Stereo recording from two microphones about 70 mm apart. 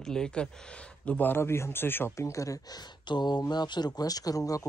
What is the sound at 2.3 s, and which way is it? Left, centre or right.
Speech, left.